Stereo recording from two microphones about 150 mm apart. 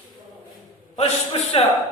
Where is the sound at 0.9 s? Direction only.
45° left (ahead or behind).